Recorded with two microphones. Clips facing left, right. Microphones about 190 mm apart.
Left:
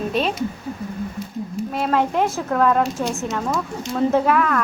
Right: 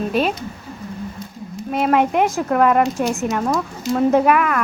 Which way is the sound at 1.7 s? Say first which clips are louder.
Right 4 dB; 20° right (ahead or behind).